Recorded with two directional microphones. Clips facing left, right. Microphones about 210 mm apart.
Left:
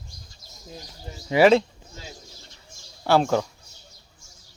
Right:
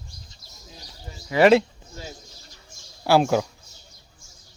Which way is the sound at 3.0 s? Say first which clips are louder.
Right 1 dB; 10° right (ahead or behind).